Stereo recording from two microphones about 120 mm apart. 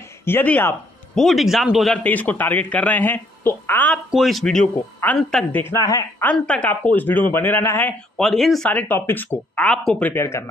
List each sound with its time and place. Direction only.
0.2 s a woman's voice: 15° left (ahead or behind)
1.1 s speech: centre (ahead or behind)
2.0 s speech: 15° left (ahead or behind)
4.1 s a woman's voice: centre (ahead or behind); by 6.2 s 25° left (ahead or behind)
6.3 s speech: 10° left (ahead or behind)
8.2 s speech: centre (ahead or behind)
8.6 s speech: 15° left (ahead or behind)